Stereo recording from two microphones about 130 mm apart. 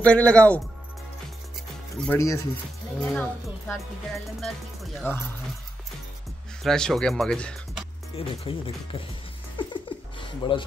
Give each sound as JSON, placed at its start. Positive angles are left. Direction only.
{"t": 0.0, "sound": "speech", "side_deg": 10}
{"t": 2.1, "sound": "speech", "side_deg": 20}
{"t": 3.0, "sound": "speech", "side_deg": 10}
{"t": 3.7, "sound": "speech", "side_deg": 0}
{"t": 5.1, "sound": "speech", "side_deg": 15}
{"t": 6.6, "sound": "speech", "side_deg": 5}
{"t": 8.2, "sound": "speech", "side_deg": 45}
{"t": 9.6, "sound": "a sound", "side_deg": 40}